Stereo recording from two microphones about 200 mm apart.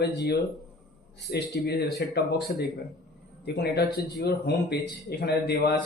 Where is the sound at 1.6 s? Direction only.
60° left (ahead or behind).